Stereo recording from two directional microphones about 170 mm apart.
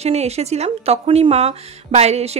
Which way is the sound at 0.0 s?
40° right (ahead or behind).